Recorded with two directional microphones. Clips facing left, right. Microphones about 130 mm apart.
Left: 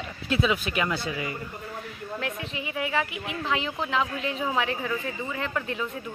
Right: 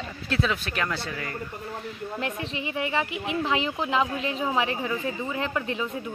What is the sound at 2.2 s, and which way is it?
Speech, 30° right (ahead or behind).